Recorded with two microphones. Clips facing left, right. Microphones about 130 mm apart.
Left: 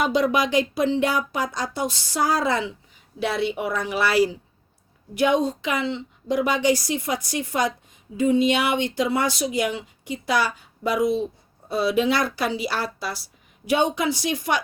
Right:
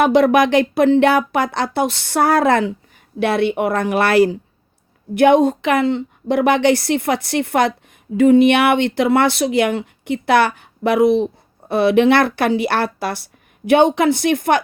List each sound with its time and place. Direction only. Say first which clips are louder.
0.0 s speech: right 8 dB; 60° right (ahead or behind)